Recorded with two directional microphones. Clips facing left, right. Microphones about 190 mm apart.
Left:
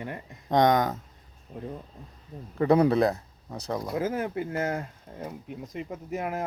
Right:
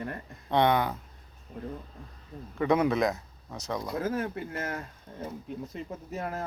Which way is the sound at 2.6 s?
35° left (ahead or behind).